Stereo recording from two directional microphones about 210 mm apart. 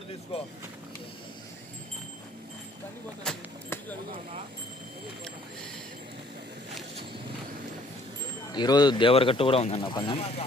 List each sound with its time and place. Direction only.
0.3 s speech: 25° left (ahead or behind)
3.2 s a sound: 10° left (ahead or behind)
8.5 s speech: 20° left (ahead or behind)